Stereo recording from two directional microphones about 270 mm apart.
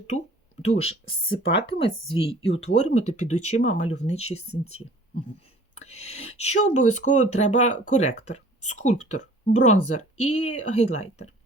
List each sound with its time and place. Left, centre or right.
0.6 s speech: left
4.4 s speech: left
5.7 s speech: left